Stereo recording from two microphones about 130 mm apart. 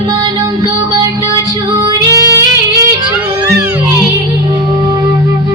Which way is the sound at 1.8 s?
25° right (ahead or behind).